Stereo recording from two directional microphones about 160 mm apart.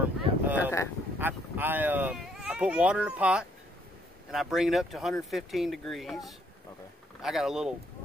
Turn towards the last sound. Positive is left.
turn(degrees=-5)  # may be behind; listen again after turning